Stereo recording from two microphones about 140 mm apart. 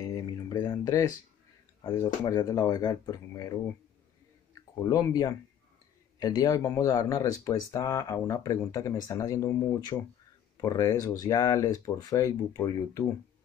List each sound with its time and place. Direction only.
0.1 s a sound: 30° left (ahead or behind)
2.0 s speech: 25° left (ahead or behind)
4.8 s speech: 25° left (ahead or behind)